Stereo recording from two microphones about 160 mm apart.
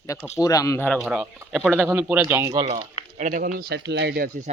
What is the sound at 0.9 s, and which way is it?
Speech, centre (ahead or behind).